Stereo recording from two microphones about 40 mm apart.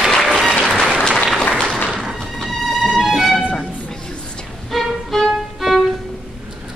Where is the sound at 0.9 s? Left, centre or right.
Centre.